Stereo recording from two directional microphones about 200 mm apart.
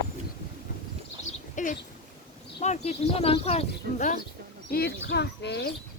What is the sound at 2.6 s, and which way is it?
Speech, 35° left (ahead or behind).